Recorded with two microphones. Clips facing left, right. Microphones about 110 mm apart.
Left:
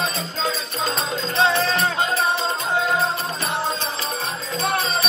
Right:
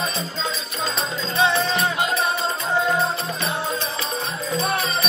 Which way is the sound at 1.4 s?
30° left (ahead or behind).